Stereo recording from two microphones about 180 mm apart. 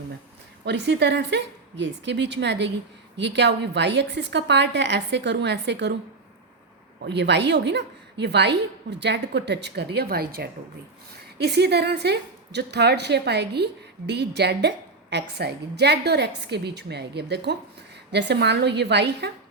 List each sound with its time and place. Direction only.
0.6 s a woman's voice: 70° right (ahead or behind)
7.0 s a woman's voice: 70° right (ahead or behind)